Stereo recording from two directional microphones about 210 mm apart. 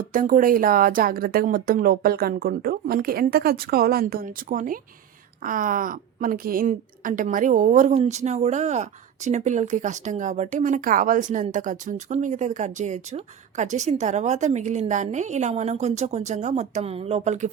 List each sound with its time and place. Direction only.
0.1 s a woman's voice: 40° right (ahead or behind)